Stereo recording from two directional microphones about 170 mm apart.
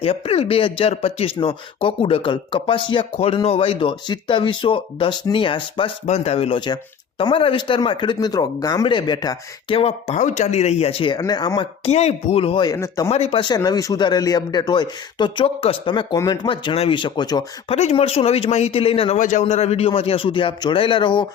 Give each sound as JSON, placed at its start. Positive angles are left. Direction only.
{"t": 0.0, "sound": "speech", "side_deg": 35}
{"t": 11.9, "sound": "speech", "side_deg": 40}
{"t": 13.1, "sound": "speech", "side_deg": 35}
{"t": 17.7, "sound": "speech", "side_deg": 35}